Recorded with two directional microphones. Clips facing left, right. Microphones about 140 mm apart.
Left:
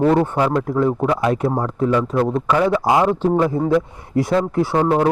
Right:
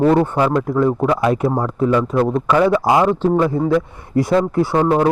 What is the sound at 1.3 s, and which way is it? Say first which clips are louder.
A man's voice: right 2 dB; 10° right (ahead or behind).